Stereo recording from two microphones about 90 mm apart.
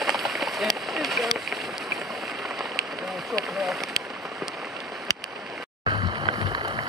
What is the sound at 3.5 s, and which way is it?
Speech, centre (ahead or behind).